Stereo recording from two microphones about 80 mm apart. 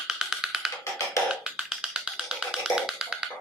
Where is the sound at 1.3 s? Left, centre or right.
Centre.